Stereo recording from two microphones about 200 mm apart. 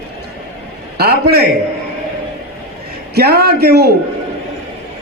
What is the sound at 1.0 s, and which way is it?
Speech, 55° right (ahead or behind).